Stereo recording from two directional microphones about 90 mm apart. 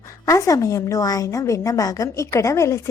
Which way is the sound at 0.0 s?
35° left (ahead or behind).